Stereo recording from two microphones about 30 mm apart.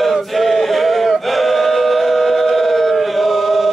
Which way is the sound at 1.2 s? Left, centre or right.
Centre.